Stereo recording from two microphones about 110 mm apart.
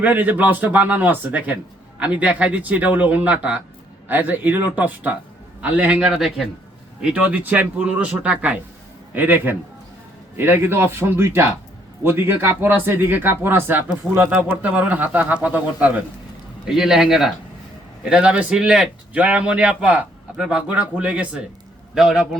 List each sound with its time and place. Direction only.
0.0 s speech: 15° right (ahead or behind)